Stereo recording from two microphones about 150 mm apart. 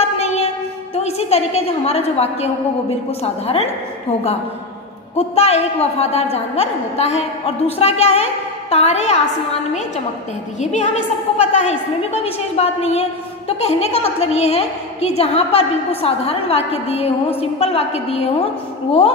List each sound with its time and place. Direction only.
0.0 s a sound: 45° left (ahead or behind)
0.9 s a woman's voice: 45° left (ahead or behind)
5.1 s a woman's voice: 45° left (ahead or behind)
10.6 s a woman's voice: 50° left (ahead or behind)